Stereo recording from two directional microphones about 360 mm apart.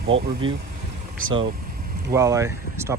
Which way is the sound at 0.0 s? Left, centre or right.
Right.